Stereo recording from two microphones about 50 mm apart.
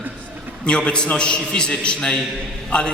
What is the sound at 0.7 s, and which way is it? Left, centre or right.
A man's voice, centre.